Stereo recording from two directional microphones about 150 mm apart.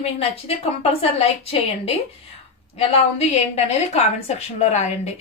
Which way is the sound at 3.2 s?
45° left (ahead or behind).